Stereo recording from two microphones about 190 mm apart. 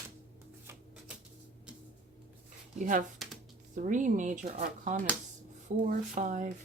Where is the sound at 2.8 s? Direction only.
45° right (ahead or behind).